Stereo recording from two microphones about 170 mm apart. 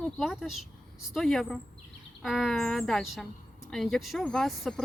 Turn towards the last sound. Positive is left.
turn(degrees=0)  # may be behind; listen again after turning